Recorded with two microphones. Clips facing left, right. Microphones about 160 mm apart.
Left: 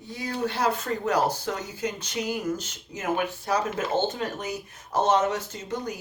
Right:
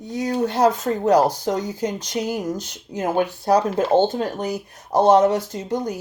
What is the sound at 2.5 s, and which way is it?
Speech, 15° right (ahead or behind).